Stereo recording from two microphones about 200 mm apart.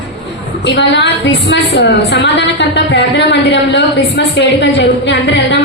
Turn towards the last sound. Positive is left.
turn(degrees=60)  # may be behind; listen again after turning